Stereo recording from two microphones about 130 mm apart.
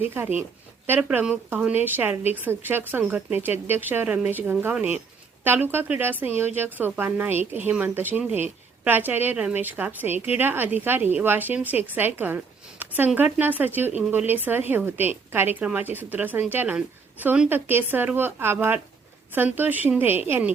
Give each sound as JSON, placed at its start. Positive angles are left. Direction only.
{"t": 0.0, "sound": "a woman's voice", "side_deg": -15}